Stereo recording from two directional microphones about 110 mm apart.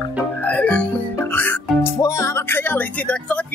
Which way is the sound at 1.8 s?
30° left (ahead or behind).